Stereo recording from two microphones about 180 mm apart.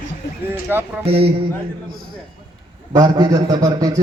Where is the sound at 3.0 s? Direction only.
20° right (ahead or behind).